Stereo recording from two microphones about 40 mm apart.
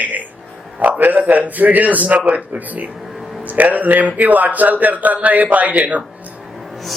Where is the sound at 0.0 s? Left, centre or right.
Right.